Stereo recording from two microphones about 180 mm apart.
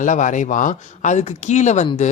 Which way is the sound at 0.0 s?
45° left (ahead or behind).